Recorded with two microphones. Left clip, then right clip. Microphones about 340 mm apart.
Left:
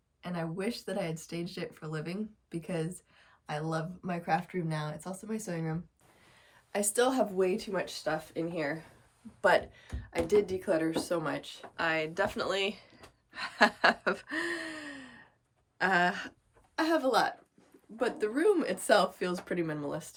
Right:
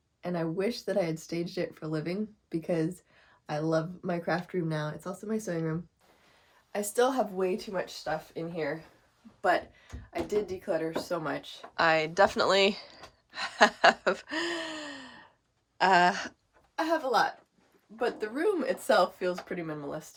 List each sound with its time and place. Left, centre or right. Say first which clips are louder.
0.2 s speech: right 6 dB; centre
6.7 s speech: right 1 dB; centre
10.2 s a woman's voice: left 4 dB; right
10.7 s speech: left 1 dB; centre
18.2 s speech: left 5 dB; centre